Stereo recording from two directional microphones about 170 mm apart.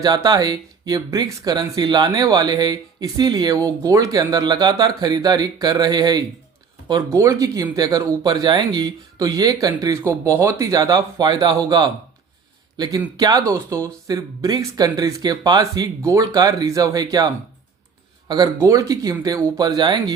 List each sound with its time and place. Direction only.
0.0 s a man's voice: 25° right (ahead or behind)